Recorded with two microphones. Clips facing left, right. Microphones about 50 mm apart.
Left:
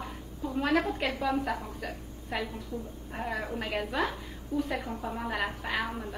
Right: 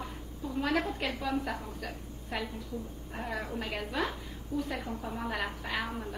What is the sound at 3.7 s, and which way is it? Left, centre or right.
A woman's voice, centre.